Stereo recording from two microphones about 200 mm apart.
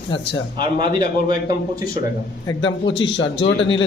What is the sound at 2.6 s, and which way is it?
A man's voice, 65° left (ahead or behind).